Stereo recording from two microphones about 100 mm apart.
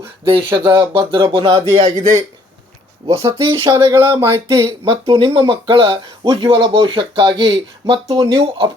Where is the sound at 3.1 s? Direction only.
65° right (ahead or behind).